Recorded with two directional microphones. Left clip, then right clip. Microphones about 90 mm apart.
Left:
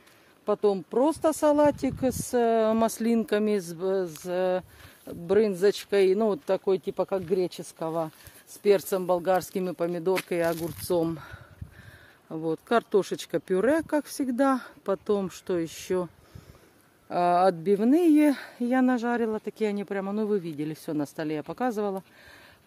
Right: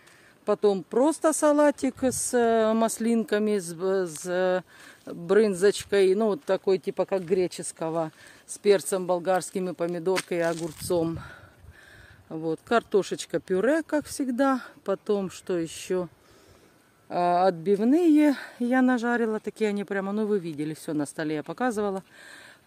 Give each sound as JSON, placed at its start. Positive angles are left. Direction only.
{"t": 0.5, "sound": "speech", "side_deg": -35}
{"t": 2.8, "sound": "speech", "side_deg": -5}
{"t": 3.7, "sound": "speech", "side_deg": -30}
{"t": 9.0, "sound": "speech", "side_deg": 15}
{"t": 17.1, "sound": "speech", "side_deg": 0}
{"t": 18.0, "sound": "speech", "side_deg": -20}